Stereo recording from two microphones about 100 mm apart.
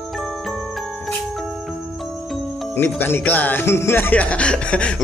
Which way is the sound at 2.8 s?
20° left (ahead or behind).